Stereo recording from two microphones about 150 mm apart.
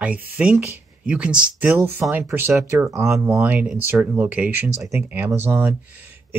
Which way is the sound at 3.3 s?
10° right (ahead or behind).